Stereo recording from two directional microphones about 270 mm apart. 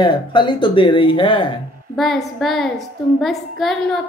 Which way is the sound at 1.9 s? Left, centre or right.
Centre.